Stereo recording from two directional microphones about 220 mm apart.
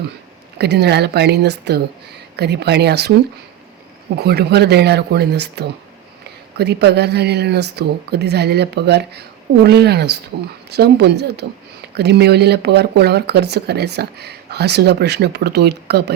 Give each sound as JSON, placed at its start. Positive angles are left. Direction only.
{"t": 0.6, "sound": "speech", "side_deg": -50}
{"t": 4.2, "sound": "speech", "side_deg": -45}